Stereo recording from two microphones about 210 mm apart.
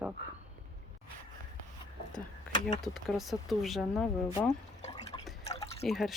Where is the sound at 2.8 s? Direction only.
Centre (ahead or behind).